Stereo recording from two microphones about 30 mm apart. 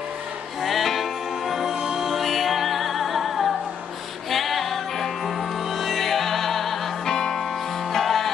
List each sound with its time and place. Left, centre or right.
0.6 s music: centre
1.5 s music: centre
5.7 s music: centre
6.0 s music: centre
7.9 s music: centre